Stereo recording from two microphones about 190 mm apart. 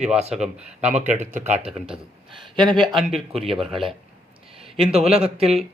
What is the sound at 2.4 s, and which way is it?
Speech, centre (ahead or behind).